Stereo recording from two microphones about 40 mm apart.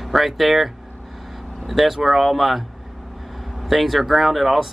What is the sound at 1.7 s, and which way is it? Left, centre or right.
Speech, centre.